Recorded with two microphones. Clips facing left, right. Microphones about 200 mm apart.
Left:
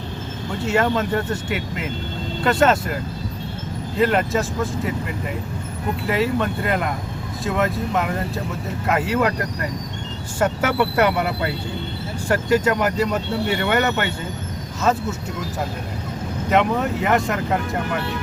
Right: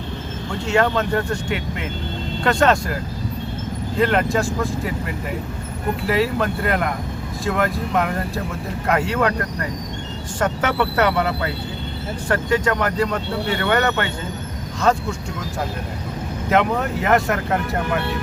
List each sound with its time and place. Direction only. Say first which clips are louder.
0.6 s speech: right 1 dB; 5° left (ahead or behind)
3.9 s speech: even; centre (ahead or behind)
6.1 s speech: right 1 dB; centre (ahead or behind)
10.4 s speech: left 1 dB; 10° left (ahead or behind)
16.5 s speech: even; centre (ahead or behind)